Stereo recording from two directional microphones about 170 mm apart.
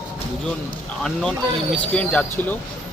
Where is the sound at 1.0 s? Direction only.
5° left (ahead or behind).